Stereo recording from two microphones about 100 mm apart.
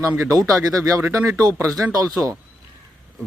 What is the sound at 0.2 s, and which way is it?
Speech, 35° right (ahead or behind).